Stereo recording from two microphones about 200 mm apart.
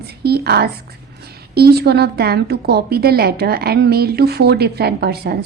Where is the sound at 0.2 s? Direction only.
55° right (ahead or behind).